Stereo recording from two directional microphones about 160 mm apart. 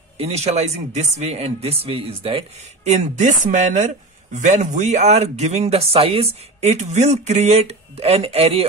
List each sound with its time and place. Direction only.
0.2 s speech: 40° right (ahead or behind)